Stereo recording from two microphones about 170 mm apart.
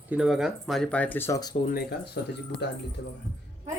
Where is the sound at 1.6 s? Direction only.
65° left (ahead or behind).